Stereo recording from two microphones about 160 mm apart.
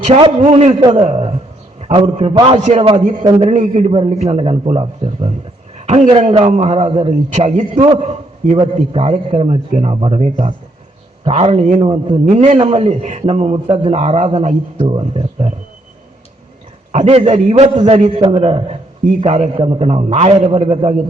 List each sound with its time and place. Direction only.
0.0 s a man's voice: 40° right (ahead or behind)
0.8 s a man's voice: 30° right (ahead or behind)
1.0 s a man's voice: 40° right (ahead or behind)
16.9 s a man's voice: 40° right (ahead or behind)